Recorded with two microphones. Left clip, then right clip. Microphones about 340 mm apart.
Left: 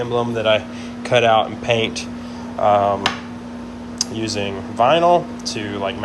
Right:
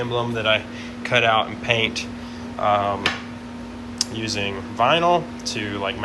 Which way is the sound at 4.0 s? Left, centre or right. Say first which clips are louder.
Left 2 dB; centre.